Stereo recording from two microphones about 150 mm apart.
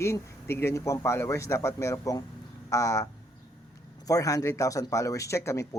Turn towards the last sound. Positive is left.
turn(degrees=20)  # may be behind; listen again after turning